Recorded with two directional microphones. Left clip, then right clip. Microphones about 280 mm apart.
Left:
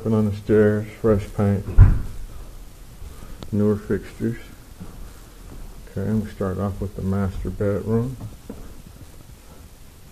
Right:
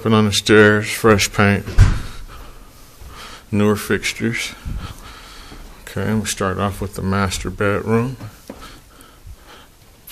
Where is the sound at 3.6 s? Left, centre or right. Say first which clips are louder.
Right 5 dB; right.